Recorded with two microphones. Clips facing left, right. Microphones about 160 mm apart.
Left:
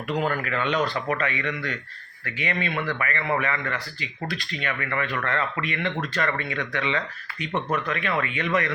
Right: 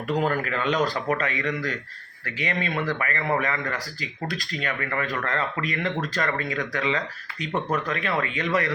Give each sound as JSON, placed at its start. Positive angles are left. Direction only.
{"t": 0.3, "sound": "speech", "side_deg": -35}